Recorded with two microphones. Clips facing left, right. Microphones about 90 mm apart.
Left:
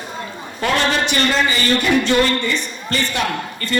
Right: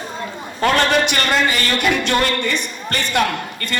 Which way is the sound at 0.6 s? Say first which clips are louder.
Right 2 dB; 55° right (ahead or behind).